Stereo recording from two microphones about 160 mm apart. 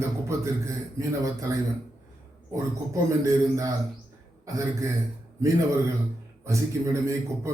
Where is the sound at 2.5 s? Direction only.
20° right (ahead or behind).